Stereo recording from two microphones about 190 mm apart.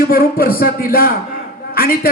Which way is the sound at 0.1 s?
50° left (ahead or behind).